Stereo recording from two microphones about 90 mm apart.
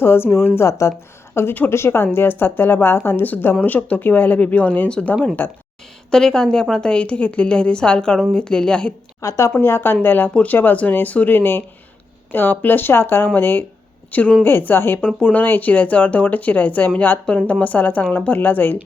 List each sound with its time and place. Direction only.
0.0 s speech: 25° left (ahead or behind)
6.1 s speech: 5° left (ahead or behind)
9.2 s speech: 35° left (ahead or behind)